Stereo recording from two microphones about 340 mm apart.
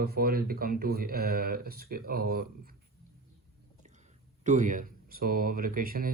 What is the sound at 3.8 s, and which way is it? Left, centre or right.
Speech, right.